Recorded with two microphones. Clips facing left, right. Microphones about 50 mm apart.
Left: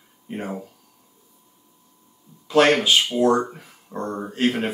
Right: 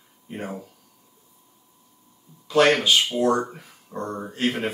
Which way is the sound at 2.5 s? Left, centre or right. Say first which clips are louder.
Left 1 dB; left.